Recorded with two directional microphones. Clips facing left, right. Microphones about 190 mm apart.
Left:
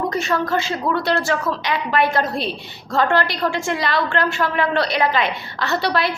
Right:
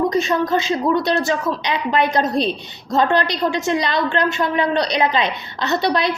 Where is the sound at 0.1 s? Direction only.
15° right (ahead or behind).